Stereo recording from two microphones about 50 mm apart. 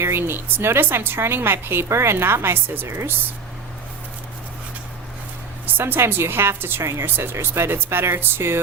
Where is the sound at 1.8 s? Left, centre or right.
Right.